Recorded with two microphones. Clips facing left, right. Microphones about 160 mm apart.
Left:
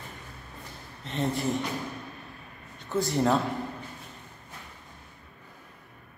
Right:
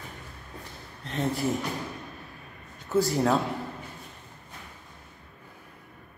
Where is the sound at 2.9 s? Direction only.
Centre (ahead or behind).